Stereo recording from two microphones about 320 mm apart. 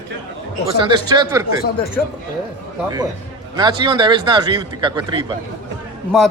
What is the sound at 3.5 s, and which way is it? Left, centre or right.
Speech, centre.